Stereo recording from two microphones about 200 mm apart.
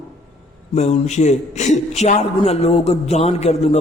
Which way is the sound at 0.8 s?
35° left (ahead or behind).